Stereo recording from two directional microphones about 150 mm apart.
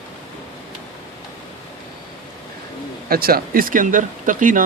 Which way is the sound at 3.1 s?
85° right.